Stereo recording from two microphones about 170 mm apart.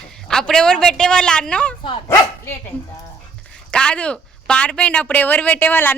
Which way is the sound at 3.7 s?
5° left (ahead or behind).